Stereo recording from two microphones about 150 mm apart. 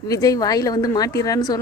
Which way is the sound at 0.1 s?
25° left (ahead or behind).